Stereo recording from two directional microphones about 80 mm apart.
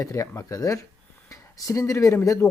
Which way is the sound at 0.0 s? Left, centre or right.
Left.